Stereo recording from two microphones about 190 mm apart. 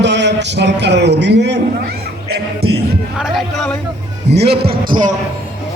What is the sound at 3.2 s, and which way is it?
Speech, centre (ahead or behind).